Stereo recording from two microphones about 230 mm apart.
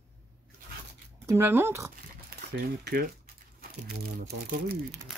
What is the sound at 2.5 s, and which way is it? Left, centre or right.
Speech, right.